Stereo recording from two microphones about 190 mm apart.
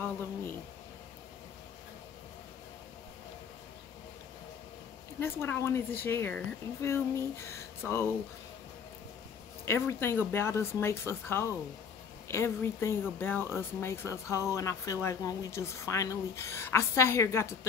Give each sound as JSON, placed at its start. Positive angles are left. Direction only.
{"t": 5.2, "sound": "speech", "side_deg": 10}
{"t": 9.7, "sound": "speech", "side_deg": 15}